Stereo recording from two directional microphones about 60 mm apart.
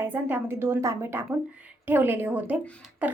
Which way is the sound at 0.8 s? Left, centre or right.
Right.